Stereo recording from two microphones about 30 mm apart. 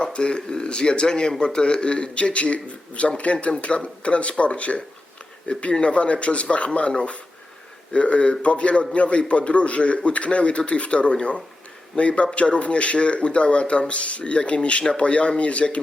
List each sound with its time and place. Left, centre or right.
0.0 s a man's voice: left